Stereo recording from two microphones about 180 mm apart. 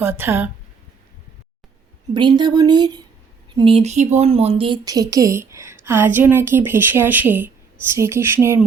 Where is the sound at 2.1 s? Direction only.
25° right (ahead or behind).